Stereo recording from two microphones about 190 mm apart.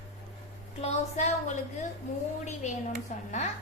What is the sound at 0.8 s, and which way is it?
A woman's voice, 35° left (ahead or behind).